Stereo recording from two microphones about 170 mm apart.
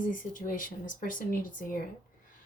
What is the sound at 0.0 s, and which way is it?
Speech, 55° left (ahead or behind).